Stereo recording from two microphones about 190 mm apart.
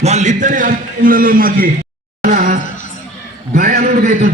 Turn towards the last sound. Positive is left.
turn(degrees=-40)  # may be behind; listen again after turning